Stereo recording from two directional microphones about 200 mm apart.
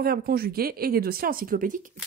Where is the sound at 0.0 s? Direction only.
50° right (ahead or behind).